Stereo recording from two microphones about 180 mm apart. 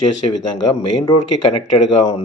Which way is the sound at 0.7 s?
25° left (ahead or behind).